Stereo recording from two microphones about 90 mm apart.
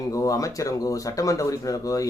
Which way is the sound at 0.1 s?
40° left (ahead or behind).